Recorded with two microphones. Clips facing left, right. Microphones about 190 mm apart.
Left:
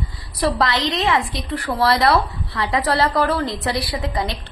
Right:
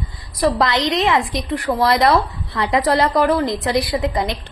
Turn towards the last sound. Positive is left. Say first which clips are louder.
# right 4 dB
turn(degrees=-20)  # may be behind; listen again after turning